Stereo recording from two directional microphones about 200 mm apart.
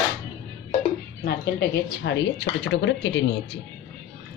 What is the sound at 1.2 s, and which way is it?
A woman's voice, 55° left (ahead or behind).